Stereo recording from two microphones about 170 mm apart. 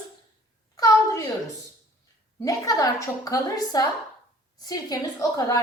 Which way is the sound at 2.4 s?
20° left (ahead or behind).